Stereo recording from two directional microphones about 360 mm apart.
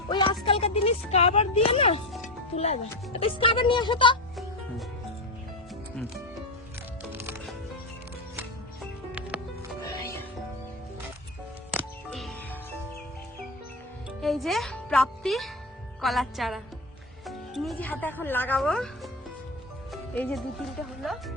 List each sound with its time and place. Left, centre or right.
0.1 s a sound: centre
0.4 s speech: centre
7.1 s music: centre
9.8 s music: centre
11.7 s music: centre
14.2 s speech: centre
19.9 s speech: centre